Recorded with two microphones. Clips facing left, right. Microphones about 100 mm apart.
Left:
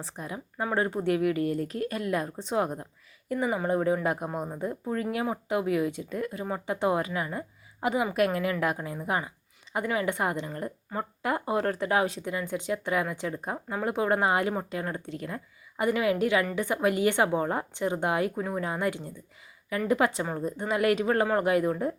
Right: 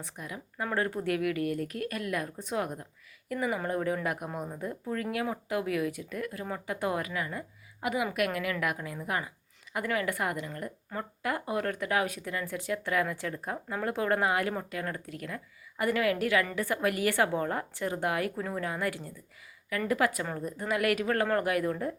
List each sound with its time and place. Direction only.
0.0 s speech: 30° left (ahead or behind)